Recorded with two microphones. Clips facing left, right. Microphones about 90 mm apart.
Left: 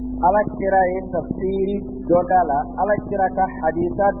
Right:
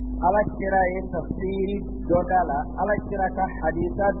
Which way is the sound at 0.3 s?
50° left (ahead or behind).